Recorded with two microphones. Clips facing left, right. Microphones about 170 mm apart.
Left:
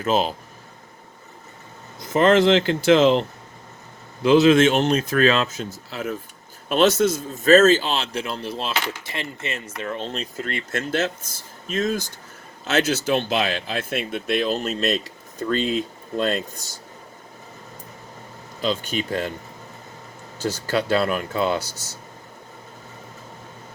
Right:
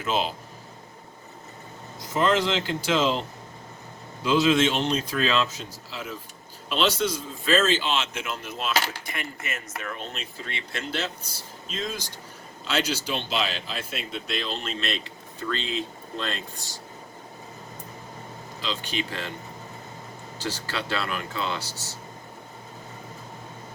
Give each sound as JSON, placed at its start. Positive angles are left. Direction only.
{"t": 0.0, "sound": "a man's voice", "side_deg": 40}
{"t": 2.1, "sound": "a man's voice", "side_deg": 60}
{"t": 10.5, "sound": "speech", "side_deg": 50}
{"t": 18.6, "sound": "speech", "side_deg": 45}
{"t": 20.4, "sound": "speech", "side_deg": 45}